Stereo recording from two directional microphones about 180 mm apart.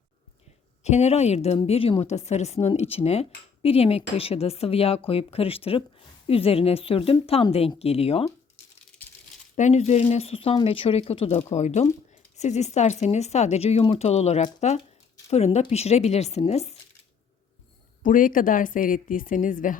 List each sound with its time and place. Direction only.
0.9 s a woman's voice: 40° left (ahead or behind)
9.6 s a woman's voice: 40° left (ahead or behind)
18.0 s a woman's voice: 50° left (ahead or behind)